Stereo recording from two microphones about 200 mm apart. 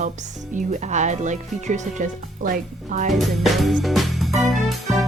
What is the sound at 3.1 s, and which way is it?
Music, centre (ahead or behind).